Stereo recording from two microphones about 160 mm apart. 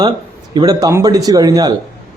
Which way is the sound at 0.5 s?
25° right (ahead or behind).